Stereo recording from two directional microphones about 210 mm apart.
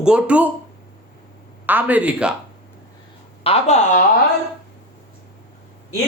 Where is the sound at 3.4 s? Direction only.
30° left (ahead or behind).